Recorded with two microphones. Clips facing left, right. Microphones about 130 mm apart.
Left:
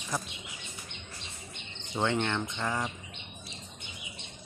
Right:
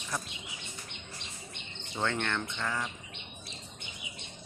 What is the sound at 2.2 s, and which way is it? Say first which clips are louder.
Speech: left 2 dB; 15° left (ahead or behind).